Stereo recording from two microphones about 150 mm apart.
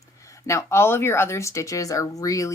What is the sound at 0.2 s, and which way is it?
Speech, 20° left (ahead or behind).